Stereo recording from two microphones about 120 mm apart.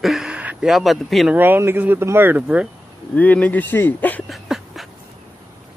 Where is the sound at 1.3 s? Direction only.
15° right (ahead or behind).